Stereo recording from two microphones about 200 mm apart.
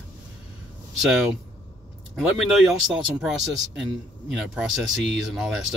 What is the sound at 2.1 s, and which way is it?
Speech, 5° right (ahead or behind).